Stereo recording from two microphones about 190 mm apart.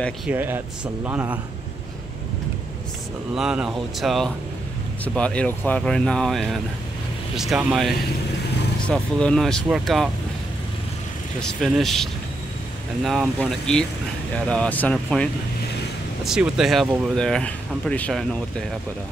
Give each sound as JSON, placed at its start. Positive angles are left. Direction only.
{"t": 0.3, "sound": "speech", "side_deg": -10}
{"t": 3.3, "sound": "speech", "side_deg": -5}
{"t": 11.6, "sound": "speech", "side_deg": 0}
{"t": 16.3, "sound": "speech", "side_deg": -5}